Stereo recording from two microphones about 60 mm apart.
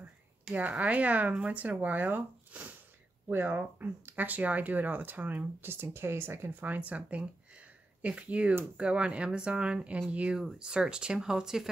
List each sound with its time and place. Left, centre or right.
0.6 s speech: right
6.7 s speech: right; by 11.7 s centre